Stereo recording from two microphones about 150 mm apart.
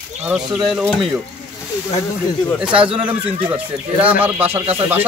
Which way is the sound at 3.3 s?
35° right (ahead or behind).